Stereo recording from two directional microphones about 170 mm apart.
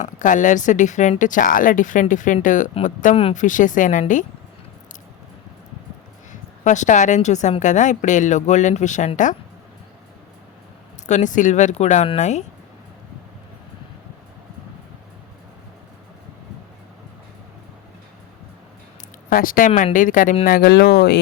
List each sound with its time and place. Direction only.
0.0 s a woman's voice: 50° left (ahead or behind)
3.2 s speech: 35° left (ahead or behind)
3.4 s a woman's voice: 50° left (ahead or behind)
6.3 s a woman's voice: 45° left (ahead or behind)
11.0 s a woman's voice: 45° left (ahead or behind)
19.3 s a woman's voice: 55° left (ahead or behind)
20.4 s speech: 65° left (ahead or behind)